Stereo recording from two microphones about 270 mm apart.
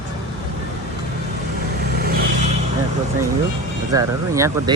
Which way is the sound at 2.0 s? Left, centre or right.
Right.